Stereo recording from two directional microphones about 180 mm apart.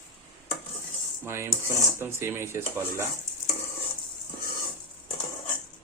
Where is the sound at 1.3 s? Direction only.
15° right (ahead or behind).